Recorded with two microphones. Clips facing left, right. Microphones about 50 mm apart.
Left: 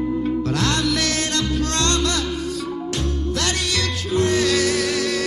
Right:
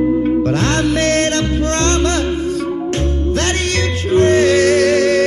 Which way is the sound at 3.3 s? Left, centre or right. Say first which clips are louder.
Right 6 dB; right.